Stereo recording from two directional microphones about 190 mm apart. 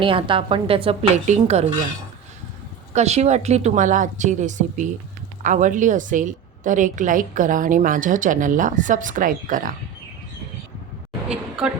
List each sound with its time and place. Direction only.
0.0 s a woman's voice: 25° right (ahead or behind)
2.9 s a woman's voice: 35° right (ahead or behind)